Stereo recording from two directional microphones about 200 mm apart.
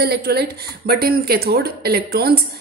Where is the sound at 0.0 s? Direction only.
50° right (ahead or behind).